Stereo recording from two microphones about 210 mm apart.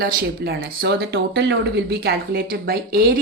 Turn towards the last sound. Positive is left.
turn(degrees=-50)  # may be behind; listen again after turning